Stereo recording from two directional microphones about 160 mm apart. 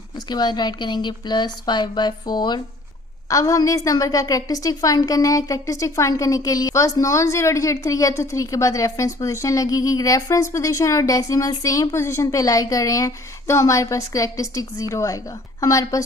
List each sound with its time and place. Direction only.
0.3 s a woman's voice: 25° left (ahead or behind)